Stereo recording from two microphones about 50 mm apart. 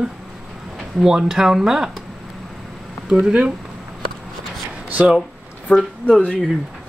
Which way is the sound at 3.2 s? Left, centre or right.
Centre.